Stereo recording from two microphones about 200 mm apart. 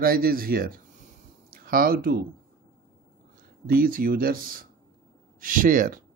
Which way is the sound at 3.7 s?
45° right (ahead or behind).